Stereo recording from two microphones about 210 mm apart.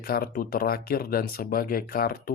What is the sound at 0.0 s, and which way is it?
Speech, 45° left (ahead or behind).